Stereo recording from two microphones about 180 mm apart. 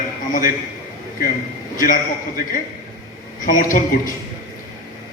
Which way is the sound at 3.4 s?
50° left (ahead or behind).